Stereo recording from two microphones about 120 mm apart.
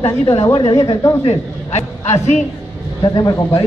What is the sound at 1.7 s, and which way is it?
Speech, 65° left (ahead or behind).